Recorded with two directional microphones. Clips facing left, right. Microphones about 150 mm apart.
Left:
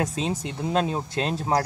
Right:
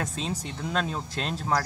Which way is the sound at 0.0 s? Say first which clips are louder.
Left 5 dB; 25° left (ahead or behind).